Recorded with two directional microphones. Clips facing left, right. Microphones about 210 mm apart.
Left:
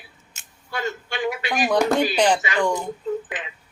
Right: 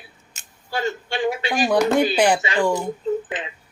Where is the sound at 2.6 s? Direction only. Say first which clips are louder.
Right 2 dB; 5° right (ahead or behind).